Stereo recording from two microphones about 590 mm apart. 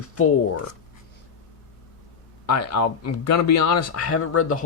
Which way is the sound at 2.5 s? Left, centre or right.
Left.